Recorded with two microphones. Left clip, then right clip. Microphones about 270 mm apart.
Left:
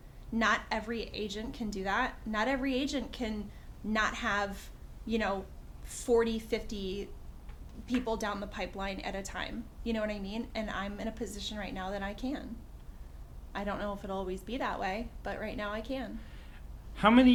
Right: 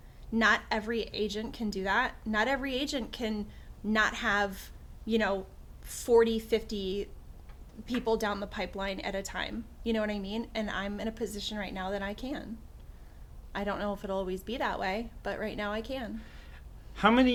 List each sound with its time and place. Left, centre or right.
0.3 s a woman's voice: right
13.5 s speech: right
16.9 s a man's voice: left